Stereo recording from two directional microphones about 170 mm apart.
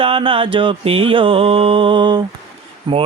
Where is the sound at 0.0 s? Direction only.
30° right (ahead or behind).